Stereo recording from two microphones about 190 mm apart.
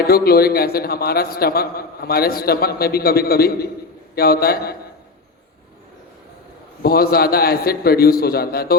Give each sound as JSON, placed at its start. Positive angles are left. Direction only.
{"t": 0.1, "sound": "a man's voice", "side_deg": 55}
{"t": 6.8, "sound": "a man's voice", "side_deg": 55}